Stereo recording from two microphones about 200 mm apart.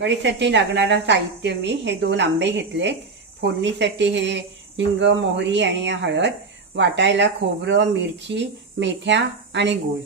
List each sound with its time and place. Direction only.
0.0 s a woman's voice: 60° right (ahead or behind)